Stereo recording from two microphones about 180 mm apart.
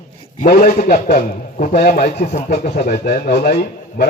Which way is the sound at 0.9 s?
55° left (ahead or behind).